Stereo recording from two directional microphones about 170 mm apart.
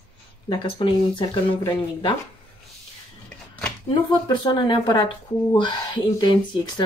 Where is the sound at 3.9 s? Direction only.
25° left (ahead or behind).